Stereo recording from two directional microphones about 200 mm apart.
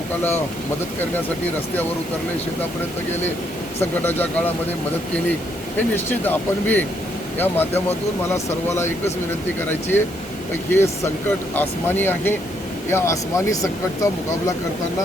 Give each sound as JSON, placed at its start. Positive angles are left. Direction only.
{"t": 3.8, "sound": "speech", "side_deg": 10}
{"t": 5.7, "sound": "speech", "side_deg": 10}